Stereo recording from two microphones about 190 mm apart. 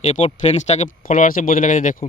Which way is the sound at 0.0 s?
35° left (ahead or behind).